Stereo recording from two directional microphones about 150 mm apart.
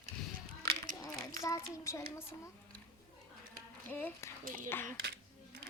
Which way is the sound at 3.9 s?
10° left (ahead or behind).